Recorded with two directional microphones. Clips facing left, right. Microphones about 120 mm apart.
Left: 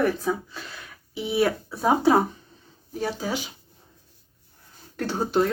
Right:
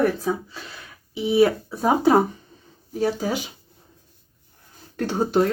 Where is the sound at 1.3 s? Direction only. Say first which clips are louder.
Right 5 dB; 40° right (ahead or behind).